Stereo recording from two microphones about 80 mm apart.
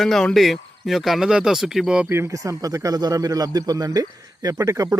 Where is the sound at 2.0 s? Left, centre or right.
Right.